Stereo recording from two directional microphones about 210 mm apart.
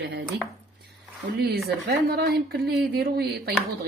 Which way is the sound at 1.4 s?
50° right (ahead or behind).